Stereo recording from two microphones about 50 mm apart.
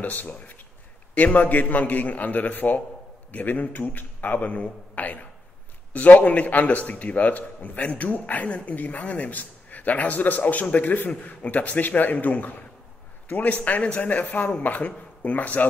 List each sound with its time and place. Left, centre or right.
0.0 s a man's voice: left